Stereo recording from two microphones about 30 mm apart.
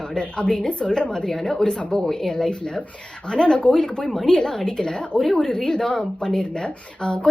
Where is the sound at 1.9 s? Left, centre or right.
Centre.